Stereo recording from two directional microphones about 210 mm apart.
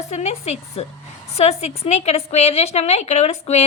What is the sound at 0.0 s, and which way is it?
A woman's voice, 30° left (ahead or behind).